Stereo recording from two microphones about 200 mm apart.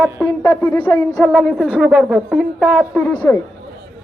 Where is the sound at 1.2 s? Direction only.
Centre (ahead or behind).